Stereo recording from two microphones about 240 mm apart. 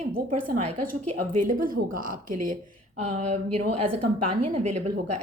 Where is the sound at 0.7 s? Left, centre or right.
Right.